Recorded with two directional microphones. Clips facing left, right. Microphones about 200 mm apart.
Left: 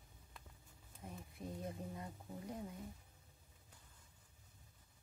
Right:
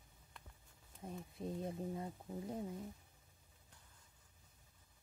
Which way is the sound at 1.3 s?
25° right (ahead or behind).